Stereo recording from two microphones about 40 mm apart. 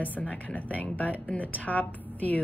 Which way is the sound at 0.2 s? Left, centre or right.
Left.